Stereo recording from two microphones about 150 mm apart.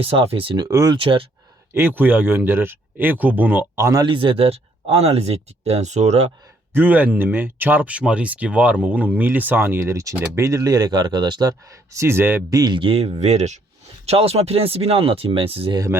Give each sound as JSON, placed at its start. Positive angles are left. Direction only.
{"t": 0.0, "sound": "speech", "side_deg": -40}
{"t": 0.9, "sound": "speech", "side_deg": -35}
{"t": 1.7, "sound": "speech", "side_deg": -15}
{"t": 4.0, "sound": "speech", "side_deg": -35}
{"t": 6.7, "sound": "speech", "side_deg": -10}